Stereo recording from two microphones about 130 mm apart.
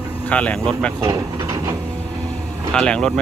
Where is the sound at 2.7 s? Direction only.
5° left (ahead or behind).